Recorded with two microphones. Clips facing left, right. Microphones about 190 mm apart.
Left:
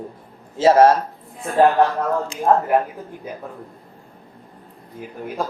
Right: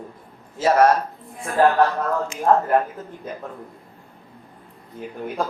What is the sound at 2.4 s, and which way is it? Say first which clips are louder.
Speech: even; 15° left (ahead or behind).